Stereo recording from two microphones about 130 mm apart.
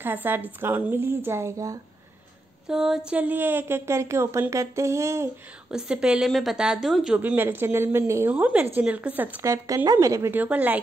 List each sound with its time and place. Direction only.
0.0 s speech: 15° right (ahead or behind)
2.7 s speech: 5° right (ahead or behind)
3.1 s speech: 15° right (ahead or behind)
5.7 s speech: 5° right (ahead or behind)
7.2 s speech: 15° right (ahead or behind)